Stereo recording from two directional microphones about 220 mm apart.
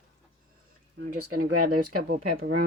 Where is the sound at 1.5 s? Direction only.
90° right.